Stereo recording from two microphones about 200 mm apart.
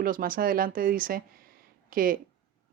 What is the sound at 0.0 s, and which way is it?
Speech, 45° right (ahead or behind).